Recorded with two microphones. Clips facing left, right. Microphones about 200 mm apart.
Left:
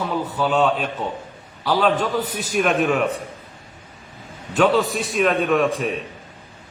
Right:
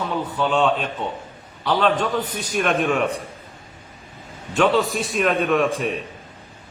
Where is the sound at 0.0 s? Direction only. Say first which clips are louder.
Left 1 dB; 5° left (ahead or behind).